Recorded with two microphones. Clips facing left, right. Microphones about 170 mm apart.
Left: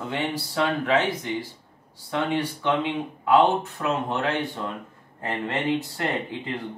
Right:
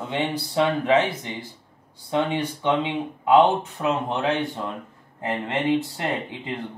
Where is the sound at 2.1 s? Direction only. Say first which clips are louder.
Right 2 dB; 20° right (ahead or behind).